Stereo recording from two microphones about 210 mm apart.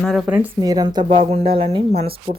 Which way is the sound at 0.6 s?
20° right (ahead or behind).